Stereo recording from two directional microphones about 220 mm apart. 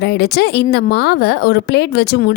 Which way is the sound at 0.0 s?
45° left (ahead or behind).